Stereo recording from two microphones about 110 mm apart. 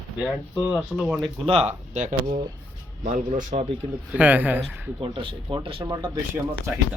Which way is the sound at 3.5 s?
70° right (ahead or behind).